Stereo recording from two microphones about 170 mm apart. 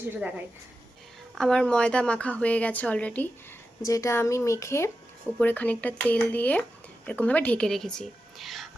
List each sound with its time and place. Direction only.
0.1 s a woman's voice: 10° right (ahead or behind)
1.4 s a woman's voice: 5° left (ahead or behind)
3.8 s a woman's voice: 20° left (ahead or behind); by 8.7 s centre (ahead or behind)